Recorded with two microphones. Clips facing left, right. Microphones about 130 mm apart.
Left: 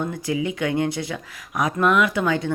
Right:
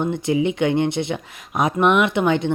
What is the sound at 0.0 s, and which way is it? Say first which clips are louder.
Speech: right 5 dB; 25° right (ahead or behind).